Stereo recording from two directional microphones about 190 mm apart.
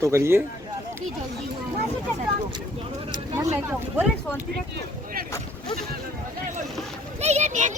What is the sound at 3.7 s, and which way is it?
Speech, 10° right (ahead or behind).